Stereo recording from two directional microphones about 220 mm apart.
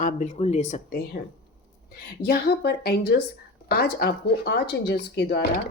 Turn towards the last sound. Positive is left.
turn(degrees=50)  # may be behind; listen again after turning